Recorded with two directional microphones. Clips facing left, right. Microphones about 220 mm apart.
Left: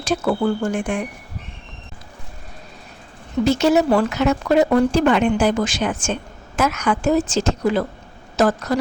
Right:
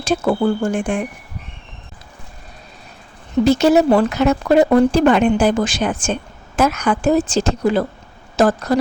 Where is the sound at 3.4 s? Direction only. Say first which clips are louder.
Right 3 dB; 35° right (ahead or behind).